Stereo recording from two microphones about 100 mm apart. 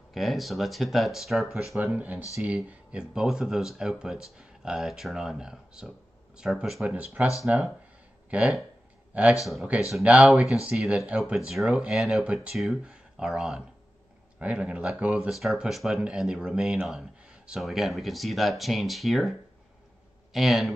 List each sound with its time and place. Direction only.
0.1 s speech: centre (ahead or behind)
1.9 s speech: 15° right (ahead or behind); by 19.3 s centre (ahead or behind)
20.3 s speech: centre (ahead or behind)